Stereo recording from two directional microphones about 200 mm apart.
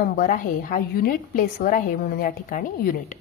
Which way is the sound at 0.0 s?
50° left (ahead or behind).